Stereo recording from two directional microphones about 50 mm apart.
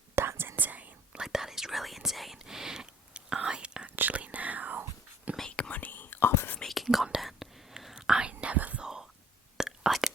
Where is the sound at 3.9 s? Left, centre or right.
Right.